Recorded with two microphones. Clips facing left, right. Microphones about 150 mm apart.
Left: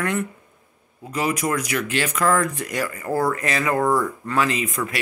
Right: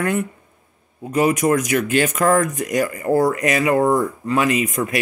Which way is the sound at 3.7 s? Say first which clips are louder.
Right 1 dB; 30° right (ahead or behind).